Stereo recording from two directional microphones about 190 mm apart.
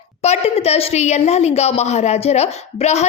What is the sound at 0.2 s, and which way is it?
A woman's voice, 35° left (ahead or behind).